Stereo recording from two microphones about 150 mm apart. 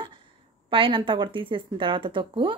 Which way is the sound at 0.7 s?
35° right (ahead or behind).